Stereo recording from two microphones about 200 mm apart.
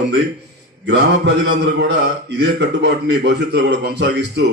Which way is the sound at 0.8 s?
60° right (ahead or behind).